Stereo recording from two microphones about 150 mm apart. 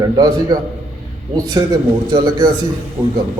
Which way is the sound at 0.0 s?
25° right (ahead or behind).